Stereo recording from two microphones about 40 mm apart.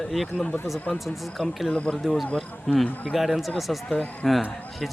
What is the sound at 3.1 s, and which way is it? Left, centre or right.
Speech, centre.